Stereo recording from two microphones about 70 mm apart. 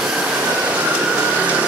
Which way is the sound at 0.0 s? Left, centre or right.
Centre.